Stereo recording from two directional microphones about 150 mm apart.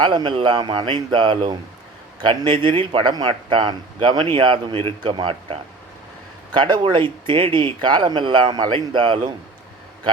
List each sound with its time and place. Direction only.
0.0 s speech: 30° right (ahead or behind)